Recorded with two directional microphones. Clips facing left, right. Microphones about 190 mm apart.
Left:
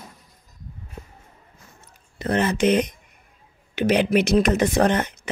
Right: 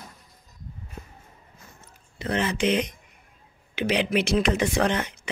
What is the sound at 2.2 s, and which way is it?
Speech, 45° left (ahead or behind).